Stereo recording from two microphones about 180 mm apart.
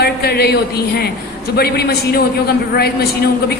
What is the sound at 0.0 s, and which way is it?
A woman's voice, 60° left (ahead or behind).